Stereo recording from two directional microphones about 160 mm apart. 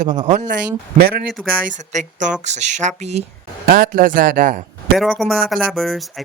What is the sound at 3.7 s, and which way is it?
Speech, 60° right (ahead or behind).